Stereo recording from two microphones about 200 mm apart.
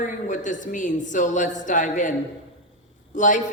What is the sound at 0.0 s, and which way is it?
A man's voice, 40° left (ahead or behind).